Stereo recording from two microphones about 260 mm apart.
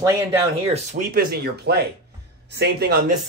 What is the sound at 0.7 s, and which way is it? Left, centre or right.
Speech, right.